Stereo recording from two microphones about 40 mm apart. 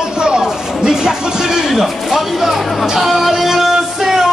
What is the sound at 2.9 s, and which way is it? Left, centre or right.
Music, centre.